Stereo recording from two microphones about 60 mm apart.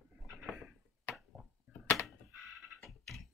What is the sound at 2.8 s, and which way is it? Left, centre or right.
Music, centre.